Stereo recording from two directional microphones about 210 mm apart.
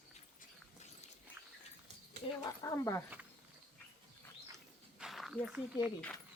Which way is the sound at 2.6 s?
15° left (ahead or behind).